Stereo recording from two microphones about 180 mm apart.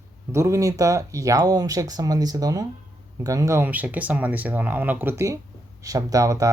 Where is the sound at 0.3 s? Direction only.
15° right (ahead or behind).